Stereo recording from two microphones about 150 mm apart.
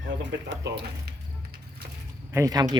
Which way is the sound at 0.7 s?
90° right.